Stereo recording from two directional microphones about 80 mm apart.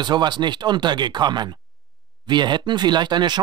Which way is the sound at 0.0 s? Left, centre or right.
Right.